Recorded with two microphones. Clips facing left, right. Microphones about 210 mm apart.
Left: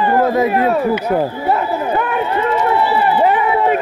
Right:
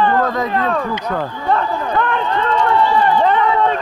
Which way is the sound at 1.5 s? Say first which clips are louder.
Left 2 dB; 10° left (ahead or behind).